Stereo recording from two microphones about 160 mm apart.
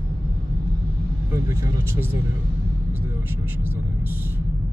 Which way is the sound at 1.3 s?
15° right (ahead or behind).